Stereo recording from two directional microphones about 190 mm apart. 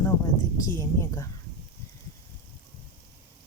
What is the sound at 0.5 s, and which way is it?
Speech, 15° left (ahead or behind).